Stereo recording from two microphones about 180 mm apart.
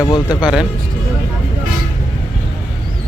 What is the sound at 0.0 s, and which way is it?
Speech, 25° left (ahead or behind).